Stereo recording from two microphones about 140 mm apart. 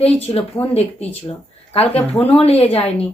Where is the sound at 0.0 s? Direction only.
45° left (ahead or behind).